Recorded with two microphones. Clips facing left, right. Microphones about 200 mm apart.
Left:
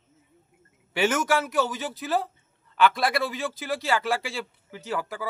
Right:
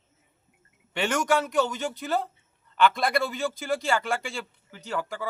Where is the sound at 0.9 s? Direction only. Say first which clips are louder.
Left 1 dB; 5° left (ahead or behind).